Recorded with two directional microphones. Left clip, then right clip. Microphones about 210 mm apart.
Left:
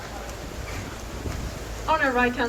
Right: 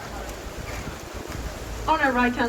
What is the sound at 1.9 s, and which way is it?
Speech, 45° right (ahead or behind).